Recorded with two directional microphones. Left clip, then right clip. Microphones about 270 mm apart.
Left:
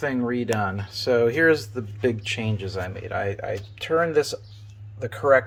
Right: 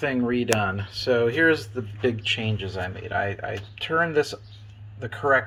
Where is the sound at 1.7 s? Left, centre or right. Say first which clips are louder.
Left 1 dB; left.